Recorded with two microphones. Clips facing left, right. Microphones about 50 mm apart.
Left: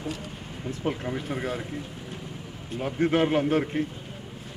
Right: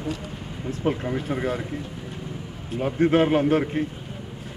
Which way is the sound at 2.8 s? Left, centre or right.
Centre.